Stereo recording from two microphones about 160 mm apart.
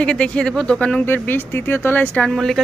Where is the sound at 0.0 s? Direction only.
5° left (ahead or behind).